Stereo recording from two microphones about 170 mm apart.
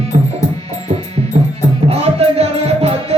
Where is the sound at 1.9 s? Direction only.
35° right (ahead or behind).